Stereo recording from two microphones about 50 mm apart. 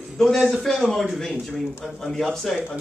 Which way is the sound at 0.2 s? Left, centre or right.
Centre.